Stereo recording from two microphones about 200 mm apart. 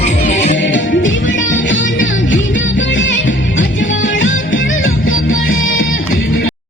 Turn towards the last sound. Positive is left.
turn(degrees=45)  # may be behind; listen again after turning